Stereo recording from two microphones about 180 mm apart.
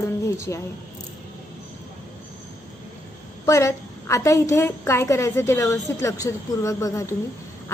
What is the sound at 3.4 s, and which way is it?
A woman's voice, 15° left (ahead or behind).